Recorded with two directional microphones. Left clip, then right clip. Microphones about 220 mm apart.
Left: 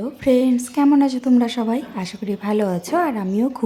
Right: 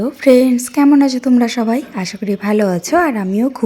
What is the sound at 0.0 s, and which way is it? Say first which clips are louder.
A woman's voice: right 7 dB; 25° right (ahead or behind).